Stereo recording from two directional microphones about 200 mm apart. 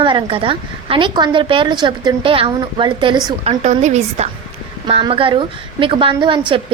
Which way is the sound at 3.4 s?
35° right (ahead or behind).